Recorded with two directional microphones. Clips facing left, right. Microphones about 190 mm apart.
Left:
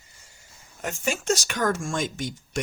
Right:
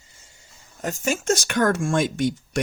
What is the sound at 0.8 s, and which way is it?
Speech, 40° right (ahead or behind).